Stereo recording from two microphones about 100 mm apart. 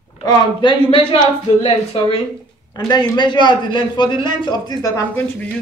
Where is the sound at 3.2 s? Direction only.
50° left (ahead or behind).